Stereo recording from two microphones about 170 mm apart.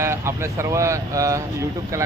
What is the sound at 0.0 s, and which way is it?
Speech, 15° right (ahead or behind).